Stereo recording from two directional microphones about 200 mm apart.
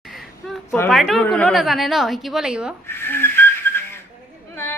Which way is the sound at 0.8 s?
Centre (ahead or behind).